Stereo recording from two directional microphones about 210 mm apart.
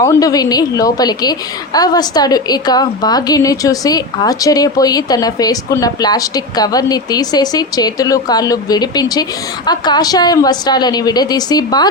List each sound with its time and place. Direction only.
0.0 s a woman's voice: 15° left (ahead or behind)